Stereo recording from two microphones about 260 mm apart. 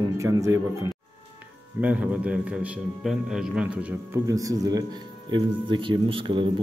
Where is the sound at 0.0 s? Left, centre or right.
Centre.